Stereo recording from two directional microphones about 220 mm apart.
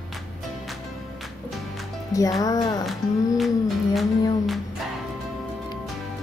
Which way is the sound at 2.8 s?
Centre (ahead or behind).